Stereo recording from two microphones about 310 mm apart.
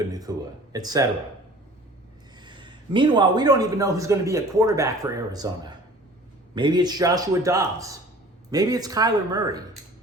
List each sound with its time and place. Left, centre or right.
0.1 s a man's voice: centre
2.4 s a man's voice: centre